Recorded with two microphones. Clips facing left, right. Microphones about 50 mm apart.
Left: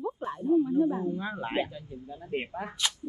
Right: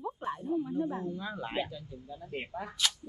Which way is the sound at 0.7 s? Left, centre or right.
Centre.